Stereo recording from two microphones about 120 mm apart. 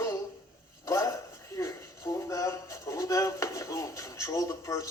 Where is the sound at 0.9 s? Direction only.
25° left (ahead or behind).